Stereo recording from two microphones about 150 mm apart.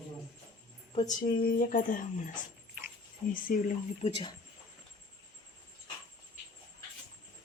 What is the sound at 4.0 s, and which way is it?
Speech, 40° left (ahead or behind).